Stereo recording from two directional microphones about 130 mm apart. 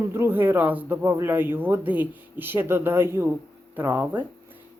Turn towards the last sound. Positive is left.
turn(degrees=-15)  # may be behind; listen again after turning